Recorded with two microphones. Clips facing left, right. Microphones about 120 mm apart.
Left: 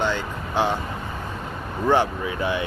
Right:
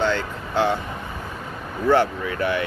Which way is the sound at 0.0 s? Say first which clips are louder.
Right 2 dB; 15° left (ahead or behind).